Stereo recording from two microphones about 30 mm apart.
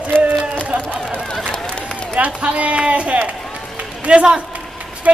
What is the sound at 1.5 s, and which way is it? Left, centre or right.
Run, left.